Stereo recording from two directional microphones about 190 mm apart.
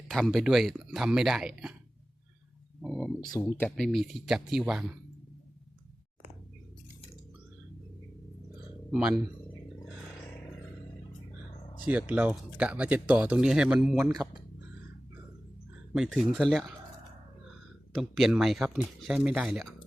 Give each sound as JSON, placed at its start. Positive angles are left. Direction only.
{"t": 0.1, "sound": "speech", "side_deg": 0}
{"t": 2.8, "sound": "speech", "side_deg": 0}
{"t": 3.3, "sound": "speech", "side_deg": 10}
{"t": 8.9, "sound": "speech", "side_deg": -5}
{"t": 11.9, "sound": "speech", "side_deg": -10}
{"t": 13.9, "sound": "speech", "side_deg": -15}
{"t": 16.0, "sound": "speech", "side_deg": 0}
{"t": 17.9, "sound": "speech", "side_deg": 0}